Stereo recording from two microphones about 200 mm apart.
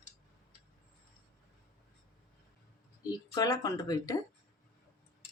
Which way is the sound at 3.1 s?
20° left (ahead or behind).